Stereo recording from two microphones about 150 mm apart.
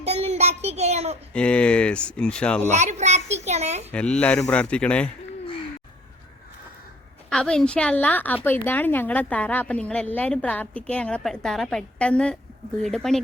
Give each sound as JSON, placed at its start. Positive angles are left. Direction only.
{"t": 0.0, "sound": "a child's voice", "side_deg": -45}
{"t": 1.3, "sound": "a woman's voice", "side_deg": 5}
{"t": 2.6, "sound": "a child's voice", "side_deg": -50}
{"t": 3.9, "sound": "a woman's voice", "side_deg": 5}
{"t": 7.3, "sound": "a woman's voice", "side_deg": 5}